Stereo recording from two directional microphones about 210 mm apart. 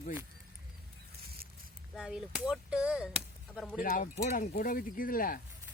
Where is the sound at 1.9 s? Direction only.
Centre (ahead or behind).